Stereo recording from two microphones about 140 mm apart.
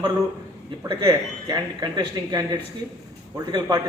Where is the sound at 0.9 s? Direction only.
25° right (ahead or behind).